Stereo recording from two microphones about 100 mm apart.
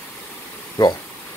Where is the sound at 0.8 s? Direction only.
45° left (ahead or behind).